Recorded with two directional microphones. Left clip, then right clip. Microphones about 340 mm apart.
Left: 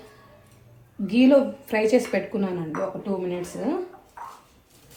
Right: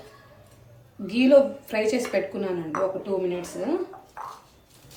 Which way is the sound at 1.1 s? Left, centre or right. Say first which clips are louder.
Right 1 dB; centre.